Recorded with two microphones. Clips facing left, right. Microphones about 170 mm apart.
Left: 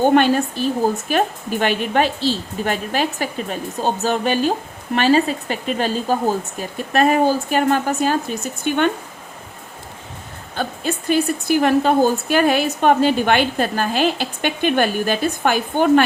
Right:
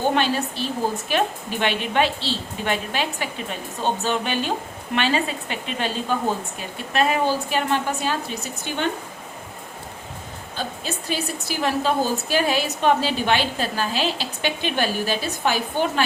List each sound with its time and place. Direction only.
0.1 s a woman's voice: 50° left (ahead or behind)
10.5 s a woman's voice: 55° left (ahead or behind)